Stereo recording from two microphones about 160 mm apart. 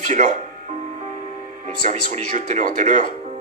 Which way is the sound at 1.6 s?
50° right (ahead or behind).